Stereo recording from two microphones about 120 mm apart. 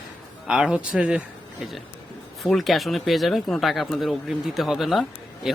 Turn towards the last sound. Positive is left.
turn(degrees=0)  # may be behind; listen again after turning